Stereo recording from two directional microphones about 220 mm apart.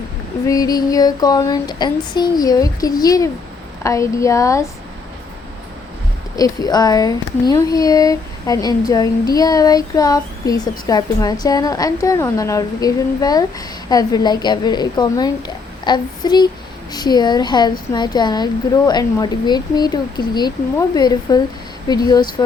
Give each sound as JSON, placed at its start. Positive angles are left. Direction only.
{"t": 0.4, "sound": "speech", "side_deg": 15}
{"t": 6.3, "sound": "speech", "side_deg": 15}